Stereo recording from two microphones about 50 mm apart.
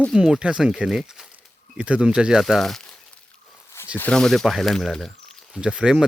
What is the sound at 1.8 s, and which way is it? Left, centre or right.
Speech, right.